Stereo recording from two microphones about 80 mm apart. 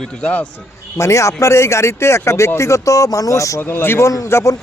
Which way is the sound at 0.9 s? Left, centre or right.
Left.